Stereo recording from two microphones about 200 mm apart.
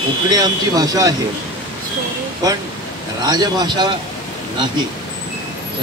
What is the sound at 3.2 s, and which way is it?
Speech, 20° right (ahead or behind).